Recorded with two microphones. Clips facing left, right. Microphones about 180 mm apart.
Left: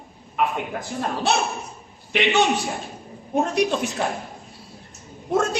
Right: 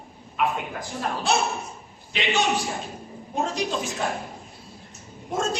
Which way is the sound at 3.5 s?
65° left (ahead or behind).